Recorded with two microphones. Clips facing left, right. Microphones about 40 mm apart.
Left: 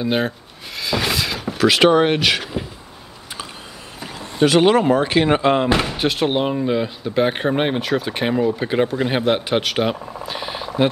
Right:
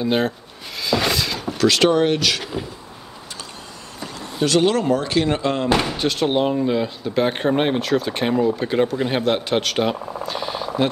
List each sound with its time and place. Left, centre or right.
0.0 s speech: centre
0.7 s door: centre; by 2.4 s left
4.0 s vehicle: centre
4.4 s speech: left
5.7 s speech: centre
5.9 s speech: centre